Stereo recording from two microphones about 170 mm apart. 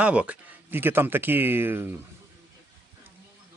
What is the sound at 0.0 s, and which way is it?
Speech, 5° right (ahead or behind).